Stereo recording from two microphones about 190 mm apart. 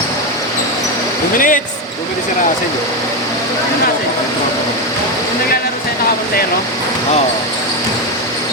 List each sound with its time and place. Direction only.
1.4 s speech: 45° left (ahead or behind)